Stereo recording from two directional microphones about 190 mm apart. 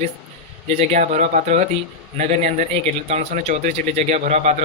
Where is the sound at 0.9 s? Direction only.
40° right (ahead or behind).